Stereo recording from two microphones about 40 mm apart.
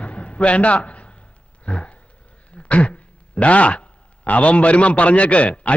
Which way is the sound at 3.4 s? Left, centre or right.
Left.